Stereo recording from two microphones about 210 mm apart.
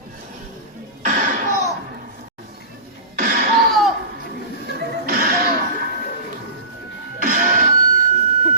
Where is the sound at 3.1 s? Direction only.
45° right (ahead or behind).